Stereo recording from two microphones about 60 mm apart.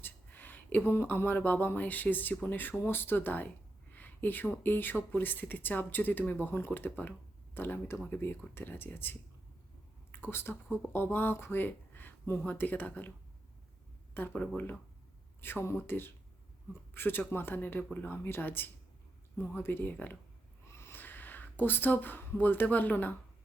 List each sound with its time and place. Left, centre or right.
0.0 s a sound: left
0.9 s speech: left
10.1 s a sound: left
10.9 s speech: left
20.7 s snort: left
21.0 s speech: left